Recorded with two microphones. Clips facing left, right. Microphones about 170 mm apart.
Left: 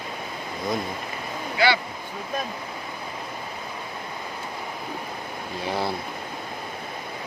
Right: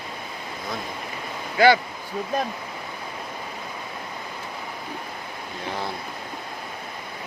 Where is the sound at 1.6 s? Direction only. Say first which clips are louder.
Right 6 dB; 45° right (ahead or behind).